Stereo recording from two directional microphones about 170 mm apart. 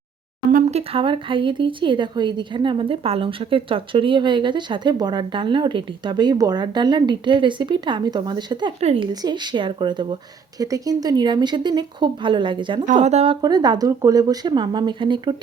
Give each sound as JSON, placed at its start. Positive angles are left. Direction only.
{"t": 0.5, "sound": "speech", "side_deg": -40}
{"t": 8.8, "sound": "speech", "side_deg": -40}
{"t": 9.2, "sound": "speech", "side_deg": -25}
{"t": 13.4, "sound": "speech", "side_deg": -25}